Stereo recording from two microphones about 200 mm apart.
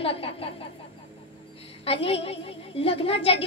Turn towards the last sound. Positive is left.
turn(degrees=30)  # may be behind; listen again after turning